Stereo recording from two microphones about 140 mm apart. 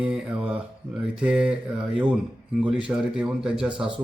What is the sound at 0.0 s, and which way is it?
Mantra, 10° right (ahead or behind).